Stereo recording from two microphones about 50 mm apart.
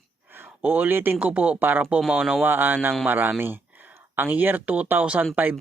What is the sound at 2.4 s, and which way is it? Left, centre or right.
Speech, right.